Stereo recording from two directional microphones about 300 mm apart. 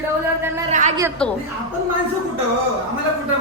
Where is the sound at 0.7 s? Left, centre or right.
Right.